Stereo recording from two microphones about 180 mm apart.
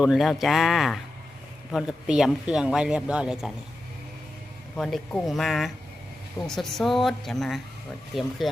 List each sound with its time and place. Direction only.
0.0 s speech: centre (ahead or behind)
4.8 s speech: centre (ahead or behind)